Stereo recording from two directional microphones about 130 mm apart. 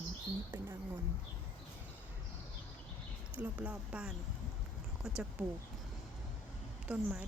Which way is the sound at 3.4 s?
10° right (ahead or behind).